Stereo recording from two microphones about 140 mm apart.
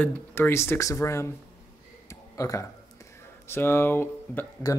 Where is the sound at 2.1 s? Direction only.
20° left (ahead or behind).